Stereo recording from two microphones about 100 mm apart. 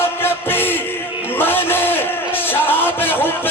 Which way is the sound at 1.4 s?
20° left (ahead or behind).